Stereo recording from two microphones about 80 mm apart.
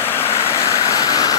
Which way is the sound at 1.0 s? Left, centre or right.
Left.